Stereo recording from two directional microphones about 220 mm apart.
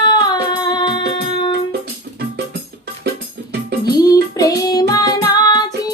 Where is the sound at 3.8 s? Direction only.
15° left (ahead or behind).